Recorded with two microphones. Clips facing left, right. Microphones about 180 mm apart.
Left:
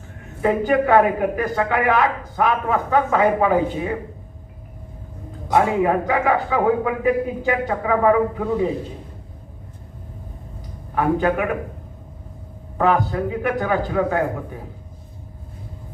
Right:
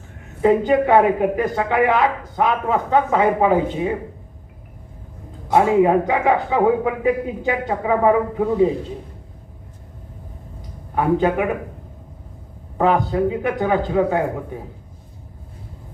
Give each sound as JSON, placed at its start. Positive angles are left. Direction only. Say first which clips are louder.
{"t": 0.4, "sound": "a man's voice", "louder": "right 3 dB", "side_deg": -20}
{"t": 5.5, "sound": "a man's voice", "louder": "right 3 dB", "side_deg": -25}
{"t": 10.9, "sound": "a man's voice", "louder": "right 1 dB", "side_deg": -20}
{"t": 12.7, "sound": "a man's voice", "louder": "right 1 dB", "side_deg": -25}